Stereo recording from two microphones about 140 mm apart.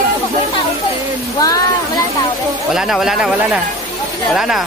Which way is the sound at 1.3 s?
25° left (ahead or behind).